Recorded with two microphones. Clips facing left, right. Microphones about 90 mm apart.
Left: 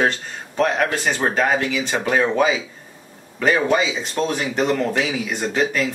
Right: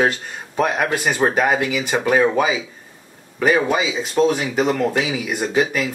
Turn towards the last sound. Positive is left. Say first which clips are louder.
# right 1 dB
turn(degrees=-10)  # may be behind; listen again after turning